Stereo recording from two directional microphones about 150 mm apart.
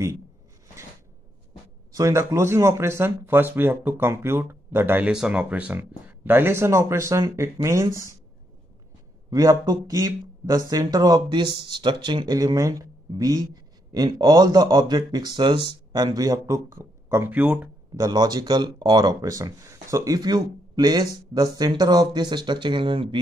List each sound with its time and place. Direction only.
2.0 s speech: 20° right (ahead or behind)
9.3 s speech: 25° right (ahead or behind)
17.9 s speech: 25° right (ahead or behind)